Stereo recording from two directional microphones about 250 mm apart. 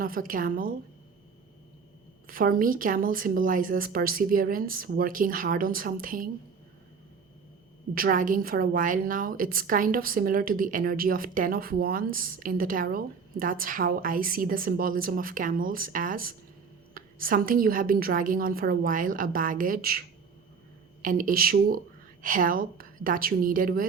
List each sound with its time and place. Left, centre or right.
0.0 s a woman's voice: right
2.2 s a woman's voice: right
7.9 s a woman's voice: right
21.0 s a woman's voice: right